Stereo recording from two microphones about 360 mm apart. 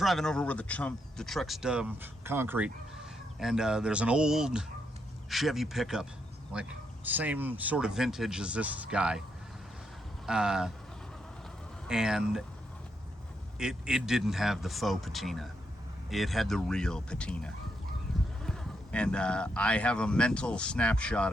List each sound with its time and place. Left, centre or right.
0.0 s speech: centre
10.2 s speech: centre
11.9 s speech: centre
13.6 s speech: centre
18.1 s a sound: centre
18.4 s speech: centre